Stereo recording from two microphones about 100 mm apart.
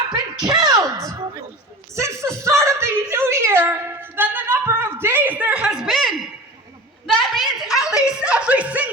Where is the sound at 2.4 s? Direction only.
30° right (ahead or behind); by 6.0 s 5° right (ahead or behind).